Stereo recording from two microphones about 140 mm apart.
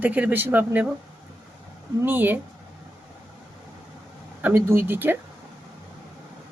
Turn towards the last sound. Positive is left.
turn(degrees=-15)  # may be behind; listen again after turning